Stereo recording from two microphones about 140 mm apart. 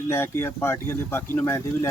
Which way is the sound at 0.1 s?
15° left (ahead or behind).